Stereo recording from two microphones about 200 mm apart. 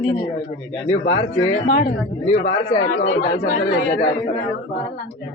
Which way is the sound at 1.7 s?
40° left (ahead or behind).